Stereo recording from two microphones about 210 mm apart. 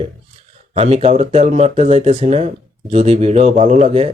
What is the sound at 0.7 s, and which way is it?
Speech, 30° right (ahead or behind).